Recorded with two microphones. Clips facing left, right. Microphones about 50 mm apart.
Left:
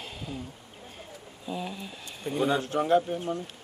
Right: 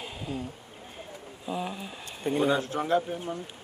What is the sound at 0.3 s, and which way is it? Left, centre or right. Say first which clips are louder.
Speech: right 4 dB; right.